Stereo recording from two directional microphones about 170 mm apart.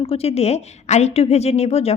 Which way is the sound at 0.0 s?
35° left (ahead or behind).